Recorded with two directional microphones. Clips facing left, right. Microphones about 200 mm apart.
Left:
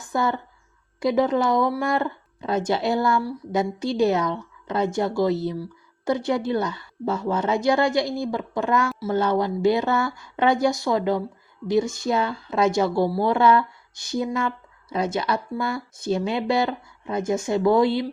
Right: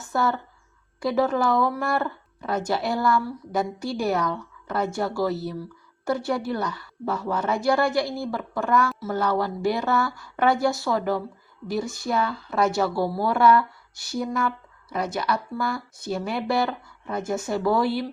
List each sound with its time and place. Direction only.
0.1 s a woman's voice: 15° left (ahead or behind)